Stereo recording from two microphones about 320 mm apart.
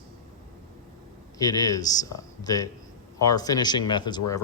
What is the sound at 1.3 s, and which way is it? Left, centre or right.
Speech, centre.